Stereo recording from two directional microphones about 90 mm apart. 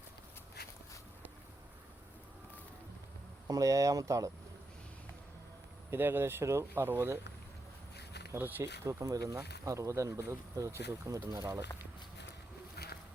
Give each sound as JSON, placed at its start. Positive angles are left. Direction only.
{"t": 3.4, "sound": "speech", "side_deg": -40}
{"t": 5.9, "sound": "speech", "side_deg": -25}
{"t": 8.3, "sound": "speech", "side_deg": -20}